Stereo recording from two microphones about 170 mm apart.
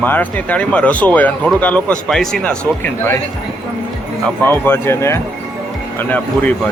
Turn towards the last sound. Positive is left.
turn(degrees=10)  # may be behind; listen again after turning